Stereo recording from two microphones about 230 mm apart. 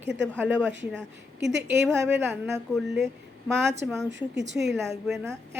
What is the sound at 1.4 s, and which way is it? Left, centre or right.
Speech, right.